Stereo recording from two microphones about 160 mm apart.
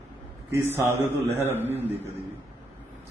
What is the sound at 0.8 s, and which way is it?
A man's voice, 15° right (ahead or behind).